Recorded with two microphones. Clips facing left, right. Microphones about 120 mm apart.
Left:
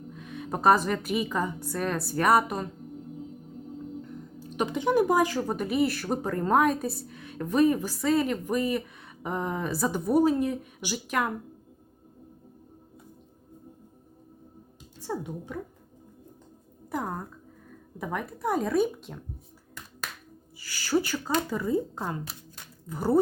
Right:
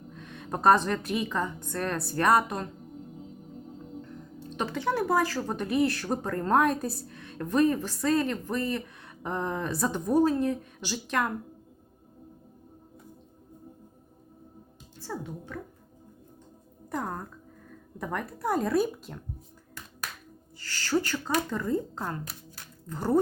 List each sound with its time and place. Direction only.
0.1 s a woman's voice: 5° left (ahead or behind)
4.4 s speech: 10° left (ahead or behind)
14.9 s speech: 15° left (ahead or behind)
16.9 s a woman's voice: 5° left (ahead or behind)
20.6 s speech: 10° left (ahead or behind)